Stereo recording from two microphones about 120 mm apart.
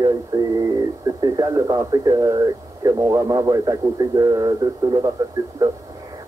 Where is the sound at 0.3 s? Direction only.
25° right (ahead or behind).